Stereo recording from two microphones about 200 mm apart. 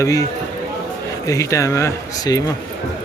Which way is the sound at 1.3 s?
15° left (ahead or behind).